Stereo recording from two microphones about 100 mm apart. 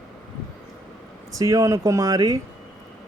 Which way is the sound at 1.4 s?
35° right (ahead or behind).